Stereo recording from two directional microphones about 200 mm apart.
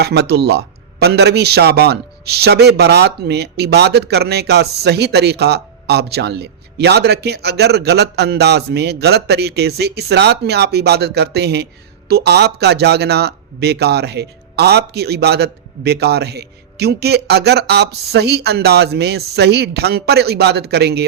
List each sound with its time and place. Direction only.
0.0 s speech: 55° right (ahead or behind)